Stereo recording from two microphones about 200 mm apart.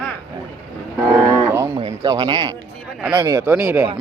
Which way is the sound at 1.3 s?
15° right (ahead or behind).